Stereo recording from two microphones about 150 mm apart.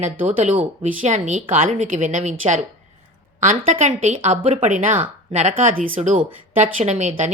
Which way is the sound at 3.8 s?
50° right (ahead or behind).